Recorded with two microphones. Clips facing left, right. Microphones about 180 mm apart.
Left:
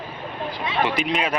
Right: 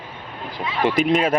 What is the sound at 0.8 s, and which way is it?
Speech, 45° right (ahead or behind).